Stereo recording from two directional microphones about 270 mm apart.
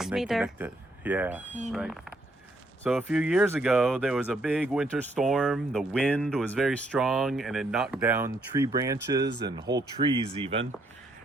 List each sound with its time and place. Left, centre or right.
0.0 s speech: centre